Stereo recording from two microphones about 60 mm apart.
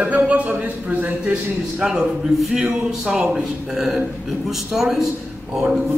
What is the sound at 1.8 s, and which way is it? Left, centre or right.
Speech, centre.